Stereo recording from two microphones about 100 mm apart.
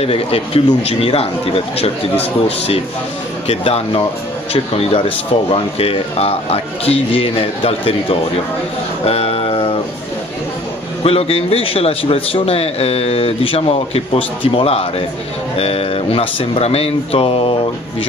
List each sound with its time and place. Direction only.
0.0 s a man's voice: 75° left (ahead or behind)
3.4 s a man's voice: 80° left
9.0 s music: 75° left (ahead or behind)
11.1 s a man's voice: 75° left (ahead or behind)